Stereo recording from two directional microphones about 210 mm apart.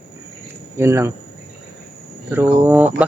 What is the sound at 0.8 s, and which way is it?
Speech, 15° right (ahead or behind).